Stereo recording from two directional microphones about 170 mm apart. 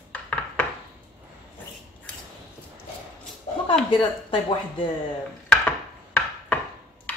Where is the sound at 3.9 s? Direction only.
30° left (ahead or behind).